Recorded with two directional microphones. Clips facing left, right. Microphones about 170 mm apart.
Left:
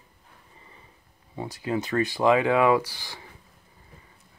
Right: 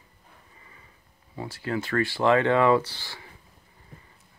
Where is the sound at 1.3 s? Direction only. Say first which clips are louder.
Left 2 dB; 15° left (ahead or behind).